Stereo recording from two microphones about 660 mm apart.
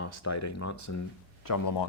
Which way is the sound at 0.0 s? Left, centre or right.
Left.